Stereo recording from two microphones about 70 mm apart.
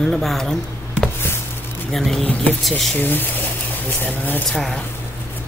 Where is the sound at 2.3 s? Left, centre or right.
Centre.